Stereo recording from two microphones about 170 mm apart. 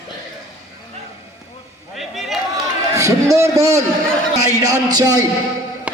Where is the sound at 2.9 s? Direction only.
20° right (ahead or behind).